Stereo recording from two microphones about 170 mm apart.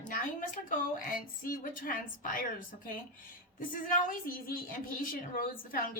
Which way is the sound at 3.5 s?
55° left (ahead or behind).